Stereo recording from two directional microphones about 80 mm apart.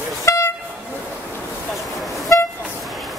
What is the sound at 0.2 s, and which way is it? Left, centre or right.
Vehicle, left.